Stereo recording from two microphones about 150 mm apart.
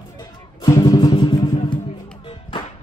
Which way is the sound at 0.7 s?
20° left (ahead or behind).